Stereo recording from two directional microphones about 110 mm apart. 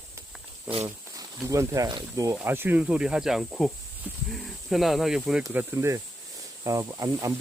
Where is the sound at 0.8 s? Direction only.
30° right (ahead or behind).